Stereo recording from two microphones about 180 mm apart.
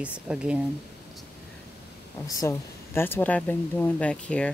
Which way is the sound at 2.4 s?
15° left (ahead or behind).